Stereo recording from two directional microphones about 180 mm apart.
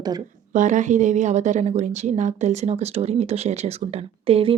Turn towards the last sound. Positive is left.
turn(degrees=-30)  # may be behind; listen again after turning